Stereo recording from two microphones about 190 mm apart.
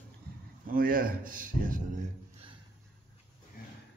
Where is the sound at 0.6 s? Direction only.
50° right (ahead or behind).